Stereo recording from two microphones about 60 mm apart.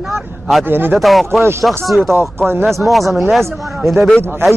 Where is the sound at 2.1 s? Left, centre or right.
Right.